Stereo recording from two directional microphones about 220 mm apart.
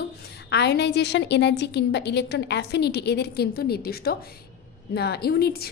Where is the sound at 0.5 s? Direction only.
50° left (ahead or behind).